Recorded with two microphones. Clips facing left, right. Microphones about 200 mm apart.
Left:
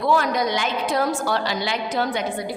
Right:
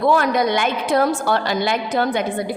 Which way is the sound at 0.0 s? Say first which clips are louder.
Right 4 dB; 55° right (ahead or behind).